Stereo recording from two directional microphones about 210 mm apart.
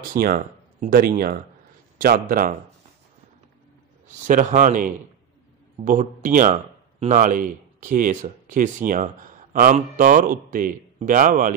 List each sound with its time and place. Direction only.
0.1 s speech: 45° right (ahead or behind)
4.3 s a man's voice: 40° right (ahead or behind)